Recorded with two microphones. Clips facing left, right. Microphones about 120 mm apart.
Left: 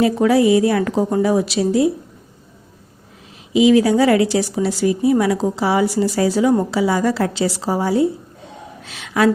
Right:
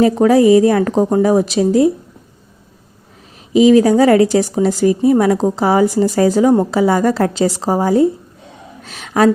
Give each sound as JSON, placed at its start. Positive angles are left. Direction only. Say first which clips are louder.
{"t": 0.0, "sound": "speech", "louder": "right 4 dB", "side_deg": -40}
{"t": 3.5, "sound": "a woman's voice", "louder": "right 4 dB", "side_deg": -40}
{"t": 8.8, "sound": "a sound", "louder": "right 4 dB", "side_deg": -40}